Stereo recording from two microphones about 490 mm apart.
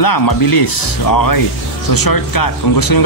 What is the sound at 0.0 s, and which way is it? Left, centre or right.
Speech, left.